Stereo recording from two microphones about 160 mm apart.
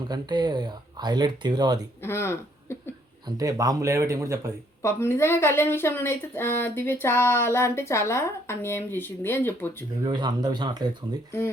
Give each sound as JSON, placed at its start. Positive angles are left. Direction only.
{"t": 0.1, "sound": "speech", "side_deg": -25}
{"t": 2.0, "sound": "speech", "side_deg": 15}
{"t": 3.2, "sound": "speech", "side_deg": -20}
{"t": 4.8, "sound": "speech", "side_deg": 15}
{"t": 10.0, "sound": "speech", "side_deg": -25}
{"t": 11.3, "sound": "speech", "side_deg": 15}